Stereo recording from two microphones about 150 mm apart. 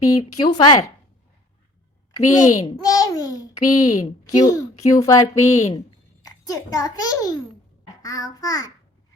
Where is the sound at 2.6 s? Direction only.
25° left (ahead or behind).